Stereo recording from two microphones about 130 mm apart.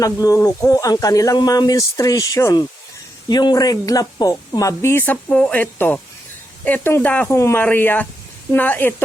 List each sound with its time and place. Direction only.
0.0 s speech: 25° left (ahead or behind)